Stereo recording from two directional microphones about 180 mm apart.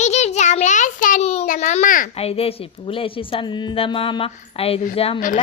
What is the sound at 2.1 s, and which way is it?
A woman's voice, 35° left (ahead or behind).